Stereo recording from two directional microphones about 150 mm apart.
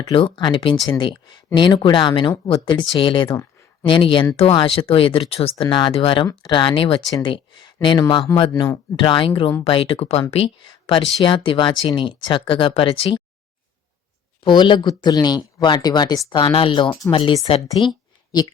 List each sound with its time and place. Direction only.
0.0 s speech: 35° left (ahead or behind)
14.4 s speech: 30° left (ahead or behind)
17.7 s a sound: 30° left (ahead or behind)